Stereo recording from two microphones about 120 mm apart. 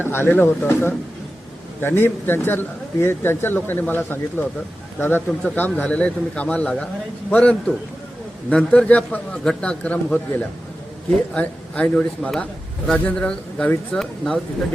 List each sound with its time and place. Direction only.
0.0 s a man's voice: 20° left (ahead or behind)
11.3 s a man's voice: 10° left (ahead or behind)